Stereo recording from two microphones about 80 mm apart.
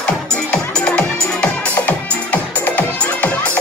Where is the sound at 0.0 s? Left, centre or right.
Centre.